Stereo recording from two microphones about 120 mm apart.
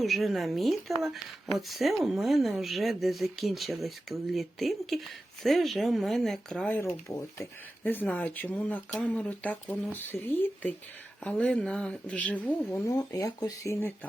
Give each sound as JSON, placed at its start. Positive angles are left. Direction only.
{"t": 0.0, "sound": "speech", "side_deg": 0}
{"t": 7.9, "sound": "speech", "side_deg": 15}
{"t": 12.9, "sound": "speech", "side_deg": 30}